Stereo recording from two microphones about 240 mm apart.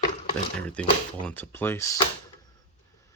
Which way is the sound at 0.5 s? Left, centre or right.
Centre.